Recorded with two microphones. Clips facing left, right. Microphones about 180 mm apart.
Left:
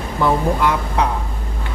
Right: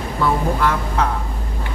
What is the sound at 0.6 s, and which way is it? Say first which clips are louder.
Speech: left 1 dB; 15° left (ahead or behind).